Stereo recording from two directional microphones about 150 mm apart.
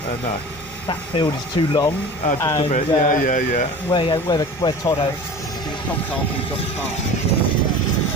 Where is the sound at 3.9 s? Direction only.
30° left (ahead or behind).